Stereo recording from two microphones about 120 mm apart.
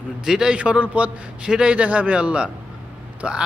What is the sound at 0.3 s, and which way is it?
A man's voice, 5° right (ahead or behind).